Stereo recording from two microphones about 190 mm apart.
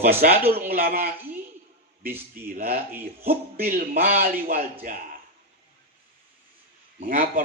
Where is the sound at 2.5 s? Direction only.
50° right (ahead or behind).